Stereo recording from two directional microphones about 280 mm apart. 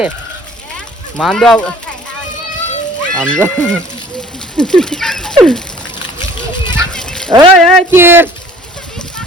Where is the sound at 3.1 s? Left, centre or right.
Centre.